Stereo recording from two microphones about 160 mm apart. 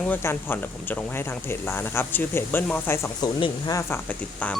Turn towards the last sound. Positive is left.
turn(degrees=30)  # may be behind; listen again after turning